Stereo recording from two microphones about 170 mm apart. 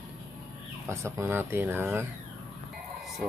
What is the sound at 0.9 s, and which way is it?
Speech, 15° right (ahead or behind).